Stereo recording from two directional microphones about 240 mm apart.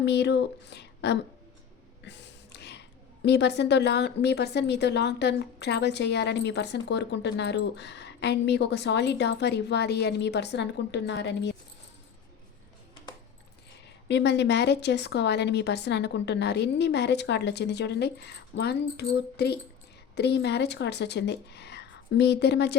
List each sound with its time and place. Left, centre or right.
0.0 s a woman's voice: left
2.0 s a sound: left
3.2 s a woman's voice: left
13.8 s a woman's voice: left